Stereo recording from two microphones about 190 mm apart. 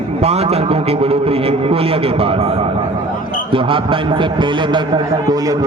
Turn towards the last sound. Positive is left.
turn(degrees=-20)  # may be behind; listen again after turning